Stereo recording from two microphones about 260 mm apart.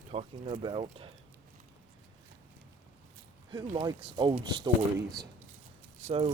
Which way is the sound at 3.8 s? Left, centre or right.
Centre.